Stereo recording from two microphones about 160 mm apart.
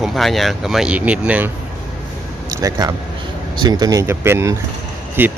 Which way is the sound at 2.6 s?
20° right (ahead or behind).